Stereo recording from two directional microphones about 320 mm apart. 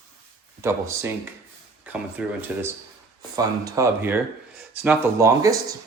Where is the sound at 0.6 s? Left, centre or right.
Centre.